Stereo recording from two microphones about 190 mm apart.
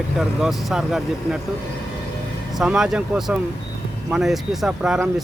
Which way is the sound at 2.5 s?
5° right (ahead or behind).